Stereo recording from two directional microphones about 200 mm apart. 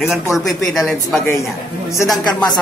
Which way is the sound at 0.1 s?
Centre (ahead or behind).